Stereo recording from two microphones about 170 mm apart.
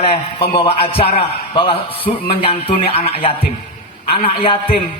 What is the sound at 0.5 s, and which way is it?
A man's voice, 35° left (ahead or behind).